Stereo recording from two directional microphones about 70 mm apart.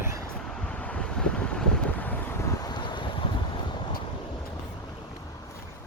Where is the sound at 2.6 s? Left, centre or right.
Left.